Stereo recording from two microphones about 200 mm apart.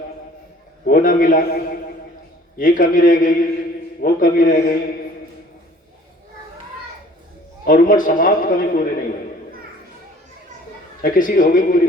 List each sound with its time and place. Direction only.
0.9 s a man's voice: 45° left (ahead or behind)
7.6 s a man's voice: 40° left (ahead or behind)
11.0 s a man's voice: 40° left (ahead or behind)